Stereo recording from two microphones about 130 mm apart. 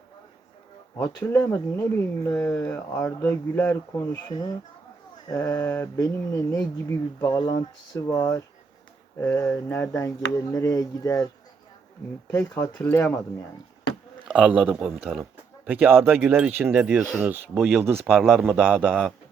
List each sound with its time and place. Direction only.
0.9 s speech: 10° left (ahead or behind)
5.3 s speech: 25° left (ahead or behind)
12.3 s speech: 25° left (ahead or behind)
14.7 s a man's voice: 5° right (ahead or behind)
17.2 s speech: 15° right (ahead or behind)
17.5 s a man's voice: centre (ahead or behind)
17.8 s speech: 15° right (ahead or behind)
18.3 s a man's voice: centre (ahead or behind)